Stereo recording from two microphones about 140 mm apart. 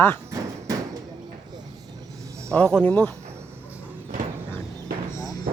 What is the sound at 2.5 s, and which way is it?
Speech, 10° left (ahead or behind).